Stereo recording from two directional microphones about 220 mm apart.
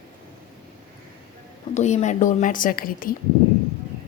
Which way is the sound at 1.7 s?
30° left (ahead or behind).